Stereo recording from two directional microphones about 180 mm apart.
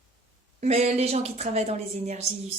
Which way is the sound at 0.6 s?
35° right (ahead or behind).